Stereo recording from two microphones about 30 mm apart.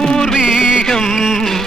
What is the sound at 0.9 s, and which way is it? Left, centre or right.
Music, centre.